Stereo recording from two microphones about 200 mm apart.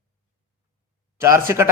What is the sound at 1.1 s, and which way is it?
Speech, 15° right (ahead or behind).